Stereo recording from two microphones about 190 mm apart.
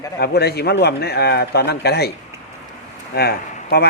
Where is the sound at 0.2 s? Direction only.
55° left (ahead or behind).